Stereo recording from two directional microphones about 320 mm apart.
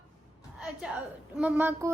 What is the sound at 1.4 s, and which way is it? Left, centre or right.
Speech, centre.